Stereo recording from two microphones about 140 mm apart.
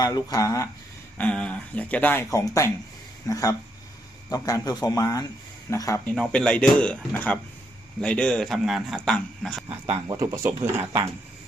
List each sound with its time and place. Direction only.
0.0 s speech: 25° left (ahead or behind)
1.2 s speech: 10° left (ahead or behind)
2.3 s speech: 25° left (ahead or behind)
6.1 s a man's voice: 5° left (ahead or behind)
10.1 s speech: 20° right (ahead or behind)